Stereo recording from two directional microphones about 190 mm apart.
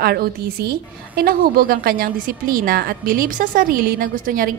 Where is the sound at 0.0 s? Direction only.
55° right (ahead or behind).